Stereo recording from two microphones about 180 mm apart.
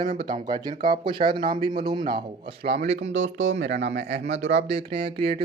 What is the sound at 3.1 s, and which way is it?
Speech, 90° right.